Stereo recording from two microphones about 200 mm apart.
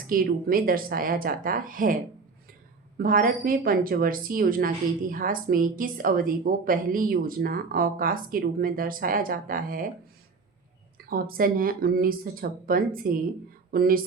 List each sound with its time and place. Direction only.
0.1 s a woman's voice: 45° right (ahead or behind)
3.0 s a woman's voice: 45° right (ahead or behind)
10.9 s a woman's voice: 45° right (ahead or behind)